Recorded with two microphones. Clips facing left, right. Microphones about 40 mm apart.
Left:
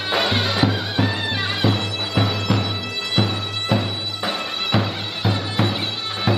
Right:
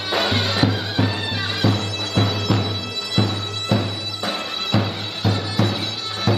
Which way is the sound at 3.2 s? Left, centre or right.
Left.